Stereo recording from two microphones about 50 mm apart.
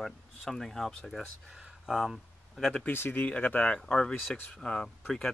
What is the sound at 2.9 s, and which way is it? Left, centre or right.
Speech, left.